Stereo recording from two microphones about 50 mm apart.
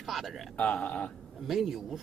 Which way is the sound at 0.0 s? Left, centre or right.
Centre.